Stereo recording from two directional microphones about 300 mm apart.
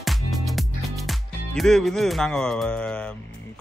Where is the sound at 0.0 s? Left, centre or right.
Centre.